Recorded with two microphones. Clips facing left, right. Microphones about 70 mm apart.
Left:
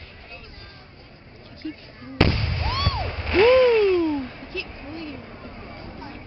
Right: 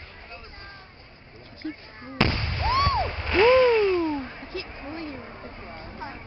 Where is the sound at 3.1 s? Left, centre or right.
Centre.